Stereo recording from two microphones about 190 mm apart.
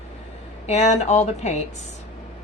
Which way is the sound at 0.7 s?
35° left (ahead or behind).